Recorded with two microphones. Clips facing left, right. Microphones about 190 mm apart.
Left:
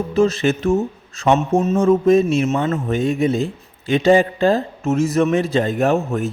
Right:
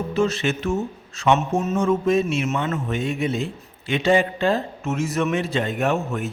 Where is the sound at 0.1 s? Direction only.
40° left (ahead or behind).